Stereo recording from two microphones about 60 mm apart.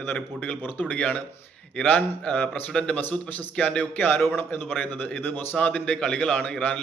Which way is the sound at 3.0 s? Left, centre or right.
Left.